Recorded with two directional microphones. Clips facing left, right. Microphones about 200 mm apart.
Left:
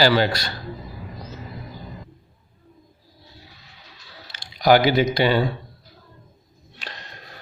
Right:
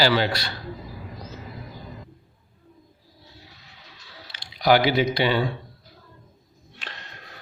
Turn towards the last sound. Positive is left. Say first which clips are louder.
# left 2 dB
turn(degrees=40)  # may be behind; listen again after turning